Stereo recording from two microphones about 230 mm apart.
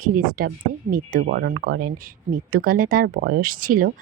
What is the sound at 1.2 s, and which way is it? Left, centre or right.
Speech, right.